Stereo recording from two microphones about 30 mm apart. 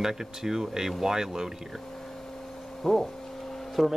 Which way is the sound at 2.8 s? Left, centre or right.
Centre.